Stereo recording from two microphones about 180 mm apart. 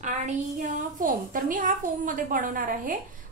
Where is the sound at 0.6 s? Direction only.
50° right (ahead or behind).